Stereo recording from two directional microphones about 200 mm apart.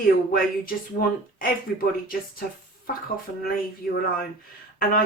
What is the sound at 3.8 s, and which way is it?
Speech, 45° left (ahead or behind).